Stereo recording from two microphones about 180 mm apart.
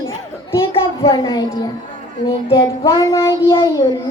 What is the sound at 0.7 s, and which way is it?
A child's voice, 25° left (ahead or behind).